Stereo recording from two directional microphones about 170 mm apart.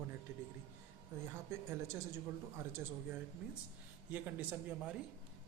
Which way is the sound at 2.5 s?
15° right (ahead or behind).